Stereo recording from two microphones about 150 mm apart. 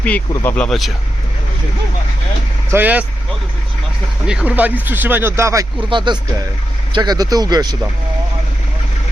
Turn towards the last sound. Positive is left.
turn(degrees=-25)  # may be behind; listen again after turning